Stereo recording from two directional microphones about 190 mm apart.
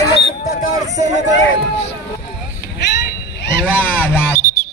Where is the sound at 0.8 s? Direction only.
35° right (ahead or behind).